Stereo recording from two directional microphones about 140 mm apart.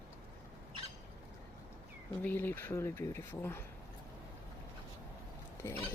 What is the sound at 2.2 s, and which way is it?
Speech, 15° left (ahead or behind).